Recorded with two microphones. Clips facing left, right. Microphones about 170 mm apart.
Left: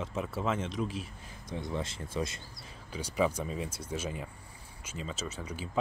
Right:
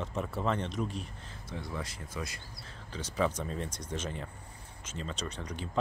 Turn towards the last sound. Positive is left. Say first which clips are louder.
# even
turn(degrees=5)  # may be behind; listen again after turning